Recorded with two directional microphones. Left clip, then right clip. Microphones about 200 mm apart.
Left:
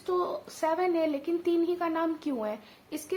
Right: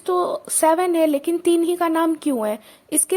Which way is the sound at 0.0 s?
40° right (ahead or behind).